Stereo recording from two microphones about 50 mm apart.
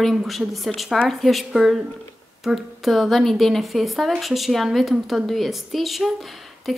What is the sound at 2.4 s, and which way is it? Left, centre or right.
A woman's voice, centre.